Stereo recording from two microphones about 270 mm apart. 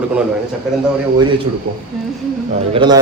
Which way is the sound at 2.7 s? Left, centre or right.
Centre.